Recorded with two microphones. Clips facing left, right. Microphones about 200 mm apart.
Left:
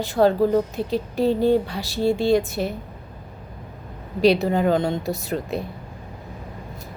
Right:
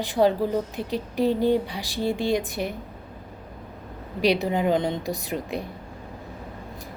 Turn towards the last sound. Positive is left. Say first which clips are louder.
# left 3 dB
turn(degrees=-15)  # may be behind; listen again after turning